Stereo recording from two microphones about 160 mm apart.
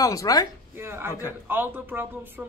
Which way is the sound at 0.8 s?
15° right (ahead or behind).